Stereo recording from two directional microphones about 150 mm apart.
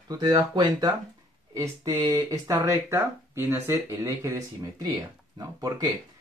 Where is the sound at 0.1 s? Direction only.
25° right (ahead or behind).